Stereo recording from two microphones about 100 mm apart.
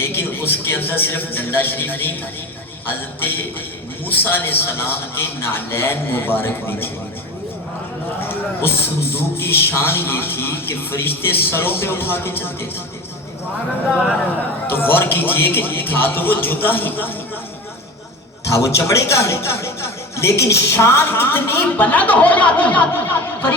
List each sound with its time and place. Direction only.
0.0 s a man's voice: 20° left (ahead or behind)
4.0 s speech: 20° left (ahead or behind)
8.2 s a man's voice: 20° left (ahead or behind)
13.9 s speech: 5° right (ahead or behind)
14.7 s speech: 20° left (ahead or behind)
18.4 s speech: 30° left (ahead or behind)